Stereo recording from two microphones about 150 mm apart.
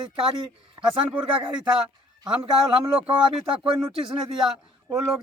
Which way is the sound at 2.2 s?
25° right (ahead or behind).